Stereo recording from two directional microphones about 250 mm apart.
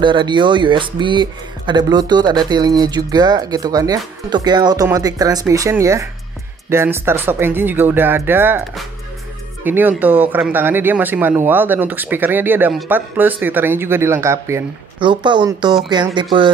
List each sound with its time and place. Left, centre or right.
0.0 s speech: centre